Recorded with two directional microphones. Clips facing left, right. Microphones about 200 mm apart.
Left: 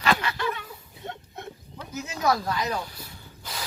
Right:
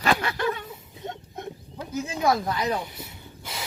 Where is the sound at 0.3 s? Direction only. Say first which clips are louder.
Right 3 dB; 20° right (ahead or behind).